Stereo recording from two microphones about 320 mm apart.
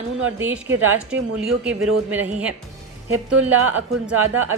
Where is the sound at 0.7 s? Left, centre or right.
Right.